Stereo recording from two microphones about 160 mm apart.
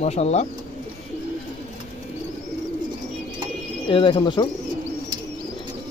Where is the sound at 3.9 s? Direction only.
35° left (ahead or behind).